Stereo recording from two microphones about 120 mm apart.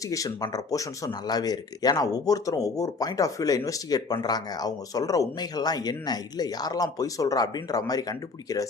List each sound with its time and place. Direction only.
0.1 s speech: 30° left (ahead or behind)